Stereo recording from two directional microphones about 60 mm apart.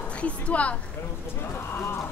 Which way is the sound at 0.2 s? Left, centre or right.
Left.